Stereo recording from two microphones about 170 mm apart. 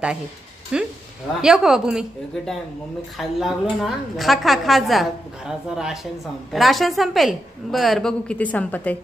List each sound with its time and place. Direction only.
0.7 s a woman's voice: 5° right (ahead or behind)